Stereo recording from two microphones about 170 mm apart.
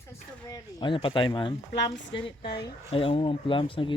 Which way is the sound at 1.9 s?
30° left (ahead or behind).